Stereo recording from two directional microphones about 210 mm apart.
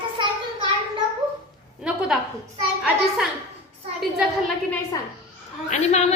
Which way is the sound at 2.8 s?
Centre (ahead or behind).